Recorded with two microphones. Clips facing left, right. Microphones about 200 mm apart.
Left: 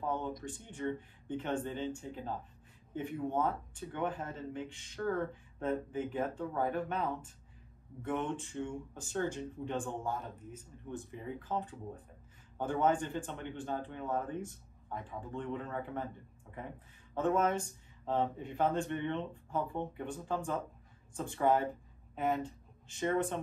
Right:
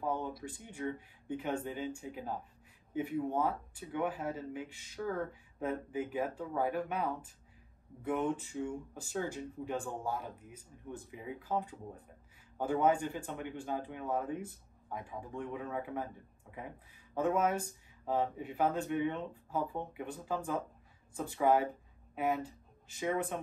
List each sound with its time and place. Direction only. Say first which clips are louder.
0.0 s speech: even; 10° right (ahead or behind)